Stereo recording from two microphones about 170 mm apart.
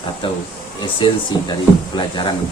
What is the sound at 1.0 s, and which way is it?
A man's voice, 30° left (ahead or behind).